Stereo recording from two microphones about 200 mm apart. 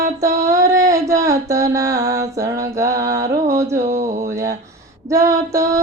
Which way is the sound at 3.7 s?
40° right (ahead or behind).